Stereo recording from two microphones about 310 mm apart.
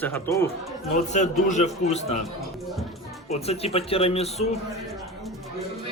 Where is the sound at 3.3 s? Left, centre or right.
Centre.